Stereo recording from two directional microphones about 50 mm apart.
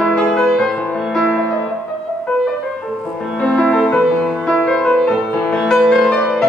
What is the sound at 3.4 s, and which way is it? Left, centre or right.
Music, left.